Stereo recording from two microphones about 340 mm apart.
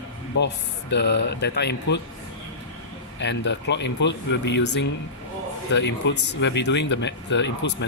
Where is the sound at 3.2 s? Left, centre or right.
Left.